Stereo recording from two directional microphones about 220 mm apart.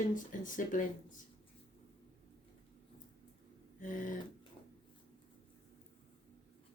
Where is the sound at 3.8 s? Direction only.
35° left (ahead or behind).